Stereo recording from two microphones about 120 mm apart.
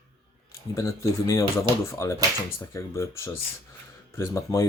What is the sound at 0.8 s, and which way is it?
Speech, 25° left (ahead or behind).